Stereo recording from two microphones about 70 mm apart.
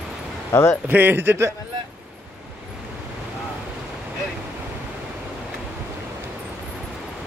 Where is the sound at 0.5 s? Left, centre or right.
Left.